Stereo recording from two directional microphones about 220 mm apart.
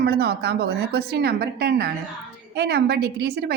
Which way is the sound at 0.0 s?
45° right (ahead or behind).